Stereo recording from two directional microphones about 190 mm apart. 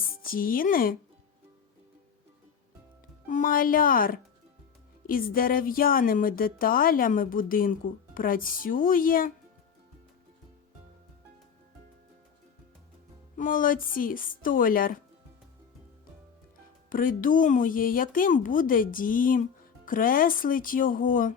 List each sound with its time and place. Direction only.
0.2 s speech: 50° left (ahead or behind)
3.2 s speech: 45° left (ahead or behind)
13.3 s speech: 45° left (ahead or behind)
16.9 s speech: 45° left (ahead or behind)